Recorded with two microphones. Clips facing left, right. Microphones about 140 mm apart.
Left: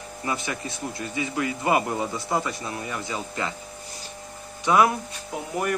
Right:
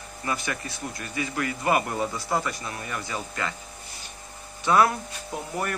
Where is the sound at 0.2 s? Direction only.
20° left (ahead or behind).